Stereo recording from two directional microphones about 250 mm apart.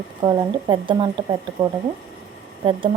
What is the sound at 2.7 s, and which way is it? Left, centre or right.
Speech, centre.